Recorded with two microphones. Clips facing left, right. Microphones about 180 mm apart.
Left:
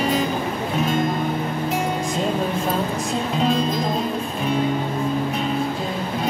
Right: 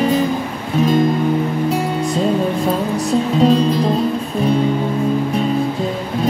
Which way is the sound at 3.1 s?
40° right (ahead or behind).